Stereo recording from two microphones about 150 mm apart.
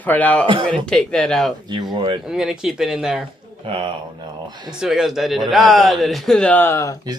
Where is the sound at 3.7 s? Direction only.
35° right (ahead or behind).